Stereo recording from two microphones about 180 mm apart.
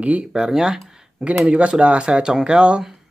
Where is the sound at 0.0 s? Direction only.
5° right (ahead or behind).